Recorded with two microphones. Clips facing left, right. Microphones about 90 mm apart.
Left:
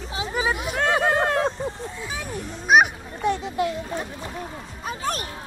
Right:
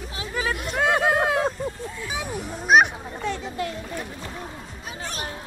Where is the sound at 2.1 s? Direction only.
10° right (ahead or behind).